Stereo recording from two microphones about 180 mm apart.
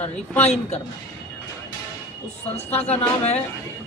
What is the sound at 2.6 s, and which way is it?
Speech, 35° left (ahead or behind).